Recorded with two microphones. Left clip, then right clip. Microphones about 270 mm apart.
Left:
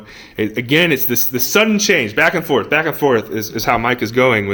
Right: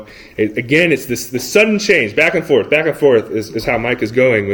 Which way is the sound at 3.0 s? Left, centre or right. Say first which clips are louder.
Right 3 dB; left.